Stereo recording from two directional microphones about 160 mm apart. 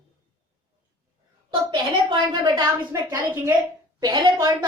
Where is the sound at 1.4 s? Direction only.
25° right (ahead or behind).